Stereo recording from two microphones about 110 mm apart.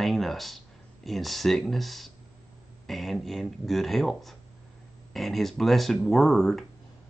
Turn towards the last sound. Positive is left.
turn(degrees=0)  # may be behind; listen again after turning